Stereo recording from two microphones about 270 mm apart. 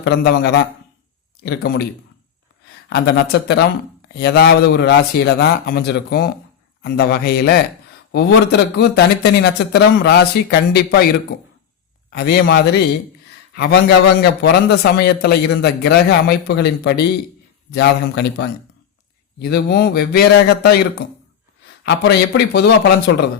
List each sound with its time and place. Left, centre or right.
0.0 s speech: left
2.9 s speech: left
12.1 s speech: left
21.8 s speech: left